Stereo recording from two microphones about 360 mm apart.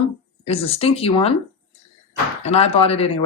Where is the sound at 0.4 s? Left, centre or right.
Centre.